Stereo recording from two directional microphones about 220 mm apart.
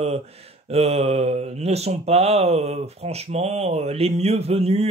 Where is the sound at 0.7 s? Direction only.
30° right (ahead or behind).